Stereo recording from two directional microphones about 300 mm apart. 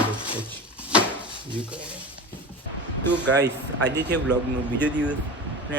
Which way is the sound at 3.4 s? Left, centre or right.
Right.